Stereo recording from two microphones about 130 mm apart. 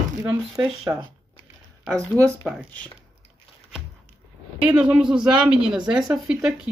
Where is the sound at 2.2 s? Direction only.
25° right (ahead or behind).